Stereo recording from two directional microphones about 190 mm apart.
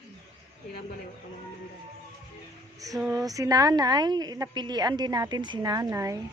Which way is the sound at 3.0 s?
15° right (ahead or behind).